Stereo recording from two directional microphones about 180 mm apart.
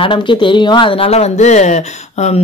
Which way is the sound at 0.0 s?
25° left (ahead or behind).